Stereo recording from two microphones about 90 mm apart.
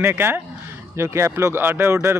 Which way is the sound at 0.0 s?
25° right (ahead or behind).